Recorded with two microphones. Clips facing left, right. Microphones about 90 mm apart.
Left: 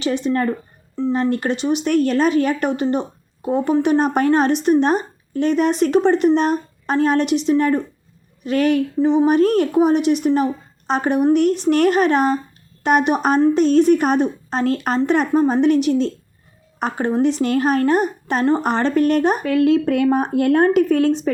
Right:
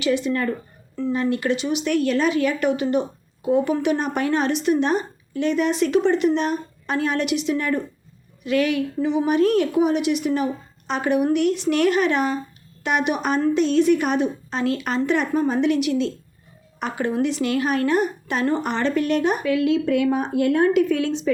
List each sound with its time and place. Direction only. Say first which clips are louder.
0.0 s a woman's voice: left 2 dB; 35° left (ahead or behind)